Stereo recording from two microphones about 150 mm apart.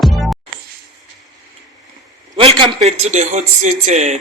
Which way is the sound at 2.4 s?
40° right (ahead or behind).